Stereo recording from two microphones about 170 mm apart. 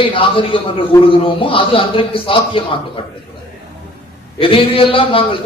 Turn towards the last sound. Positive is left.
turn(degrees=30)  # may be behind; listen again after turning